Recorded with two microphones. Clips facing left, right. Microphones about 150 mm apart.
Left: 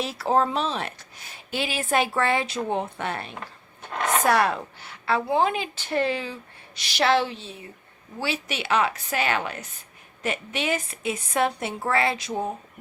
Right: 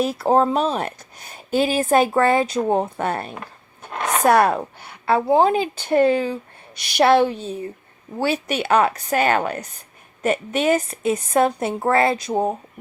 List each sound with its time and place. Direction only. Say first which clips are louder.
0.0 s speech: right 5 dB; 45° right (ahead or behind)
3.9 s a sound: right 1 dB; centre (ahead or behind)
4.2 s speech: right 7 dB; 50° right (ahead or behind)